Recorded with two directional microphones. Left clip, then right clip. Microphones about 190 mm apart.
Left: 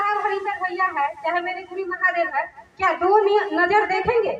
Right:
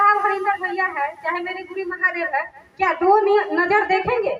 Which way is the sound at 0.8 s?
30° right (ahead or behind).